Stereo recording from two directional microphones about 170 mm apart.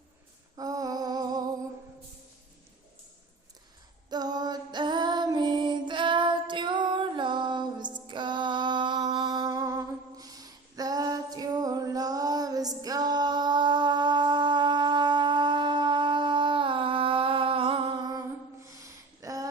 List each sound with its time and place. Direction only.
0.5 s lullaby: 20° right (ahead or behind)
4.1 s female singing: 25° right (ahead or behind)
19.2 s a sound: 20° right (ahead or behind)